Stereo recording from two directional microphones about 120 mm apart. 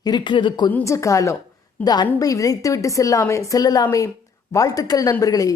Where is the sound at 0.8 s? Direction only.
25° left (ahead or behind).